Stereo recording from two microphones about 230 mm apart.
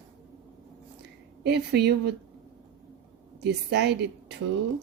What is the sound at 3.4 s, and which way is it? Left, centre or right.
Speech, right.